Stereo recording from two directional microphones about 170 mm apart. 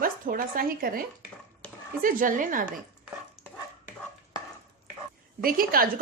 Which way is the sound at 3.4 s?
10° left (ahead or behind).